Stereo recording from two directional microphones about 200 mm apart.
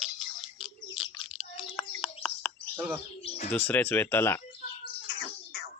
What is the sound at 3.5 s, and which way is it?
Speech, 10° left (ahead or behind).